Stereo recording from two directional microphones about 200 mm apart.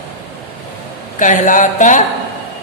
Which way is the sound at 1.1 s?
40° left (ahead or behind).